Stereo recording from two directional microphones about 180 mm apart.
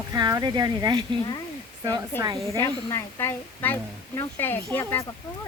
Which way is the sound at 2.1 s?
10° left (ahead or behind).